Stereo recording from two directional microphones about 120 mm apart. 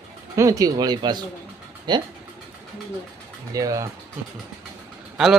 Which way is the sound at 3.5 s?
30° right (ahead or behind).